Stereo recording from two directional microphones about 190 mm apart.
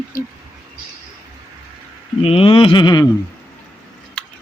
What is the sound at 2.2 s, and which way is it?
Speech, 30° left (ahead or behind).